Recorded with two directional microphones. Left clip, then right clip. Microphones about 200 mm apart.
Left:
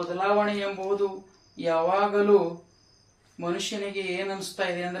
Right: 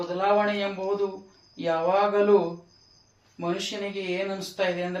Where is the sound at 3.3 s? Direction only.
15° left (ahead or behind).